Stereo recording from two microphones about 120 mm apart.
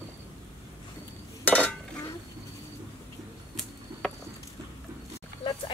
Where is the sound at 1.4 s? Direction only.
10° left (ahead or behind).